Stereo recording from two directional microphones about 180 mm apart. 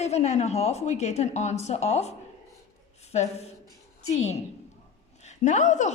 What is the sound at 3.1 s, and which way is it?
A woman's voice, 35° left (ahead or behind).